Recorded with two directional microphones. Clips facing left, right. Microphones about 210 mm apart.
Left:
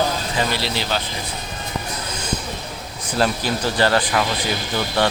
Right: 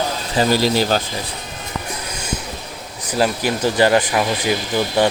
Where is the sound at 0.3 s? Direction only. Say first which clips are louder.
Right 11 dB; 40° right (ahead or behind).